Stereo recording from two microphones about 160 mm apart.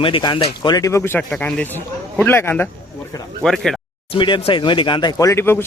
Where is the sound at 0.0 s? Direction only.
30° left (ahead or behind); by 2.6 s 15° left (ahead or behind).